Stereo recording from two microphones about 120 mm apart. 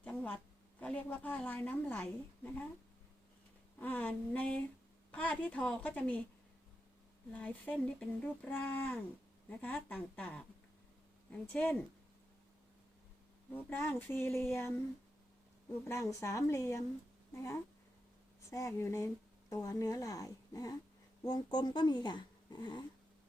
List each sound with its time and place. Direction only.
0.0 s a sound: 10° left (ahead or behind)
0.8 s a woman's voice: 10° left (ahead or behind)
3.8 s a woman's voice: 15° left (ahead or behind)
7.3 s a woman's voice: 15° left (ahead or behind)
13.5 s speech: 15° left (ahead or behind)
16.2 s speech: 25° left (ahead or behind)